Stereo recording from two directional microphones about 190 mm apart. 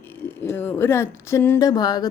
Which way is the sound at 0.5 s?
10° left (ahead or behind).